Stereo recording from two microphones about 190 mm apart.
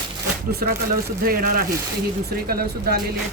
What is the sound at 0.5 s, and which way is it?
A woman's voice, 55° right (ahead or behind).